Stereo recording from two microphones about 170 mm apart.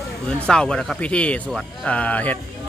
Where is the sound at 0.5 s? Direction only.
5° left (ahead or behind).